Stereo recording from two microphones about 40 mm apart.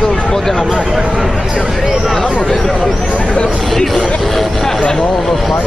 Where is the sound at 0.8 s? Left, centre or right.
Centre.